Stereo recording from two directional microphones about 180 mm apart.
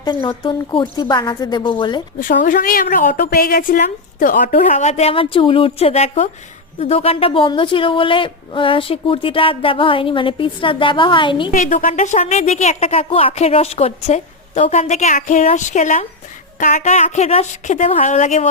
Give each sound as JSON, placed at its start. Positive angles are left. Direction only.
{"t": 0.0, "sound": "a woman's voice", "side_deg": 25}
{"t": 2.4, "sound": "a woman's voice", "side_deg": 50}
{"t": 11.5, "sound": "speech", "side_deg": 45}